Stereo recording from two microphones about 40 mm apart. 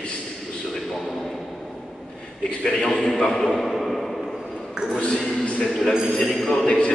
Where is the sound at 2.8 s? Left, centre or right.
Centre.